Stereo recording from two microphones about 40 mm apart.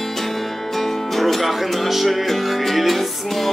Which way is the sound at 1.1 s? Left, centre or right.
Centre.